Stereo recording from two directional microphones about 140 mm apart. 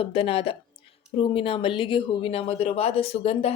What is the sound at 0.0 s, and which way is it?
Speech, 40° left (ahead or behind).